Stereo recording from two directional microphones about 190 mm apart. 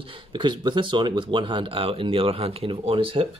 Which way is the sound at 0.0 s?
25° right (ahead or behind).